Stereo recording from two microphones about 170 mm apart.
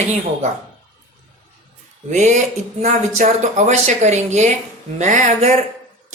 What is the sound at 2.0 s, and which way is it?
Speech, 45° right (ahead or behind).